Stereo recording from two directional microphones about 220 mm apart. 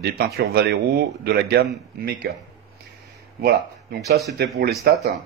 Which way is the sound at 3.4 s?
45° right (ahead or behind).